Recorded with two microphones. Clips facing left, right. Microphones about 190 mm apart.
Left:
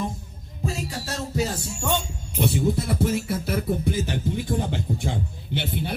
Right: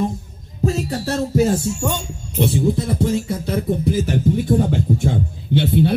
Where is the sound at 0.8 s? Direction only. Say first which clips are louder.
Right 10 dB; 55° right (ahead or behind).